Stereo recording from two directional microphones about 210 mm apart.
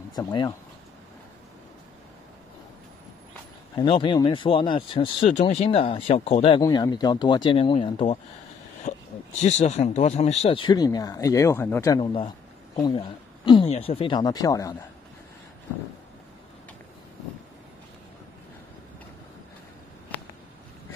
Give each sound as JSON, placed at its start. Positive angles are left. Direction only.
{"t": 0.1, "sound": "speech", "side_deg": 20}
{"t": 3.7, "sound": "speech", "side_deg": 20}
{"t": 8.9, "sound": "a sound", "side_deg": 30}
{"t": 9.4, "sound": "speech", "side_deg": 30}